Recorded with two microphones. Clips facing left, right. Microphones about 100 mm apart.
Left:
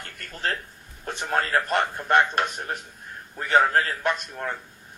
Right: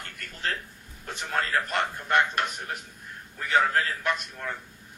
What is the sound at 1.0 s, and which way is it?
A man's voice, 35° left (ahead or behind).